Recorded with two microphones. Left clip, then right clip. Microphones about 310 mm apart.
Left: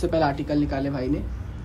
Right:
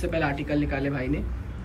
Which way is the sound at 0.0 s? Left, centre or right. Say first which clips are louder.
Left 4 dB; centre.